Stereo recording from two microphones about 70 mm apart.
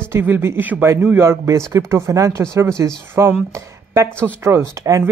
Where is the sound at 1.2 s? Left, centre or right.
Right.